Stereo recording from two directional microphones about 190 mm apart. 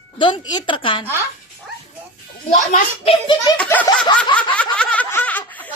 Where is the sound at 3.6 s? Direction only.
10° left (ahead or behind).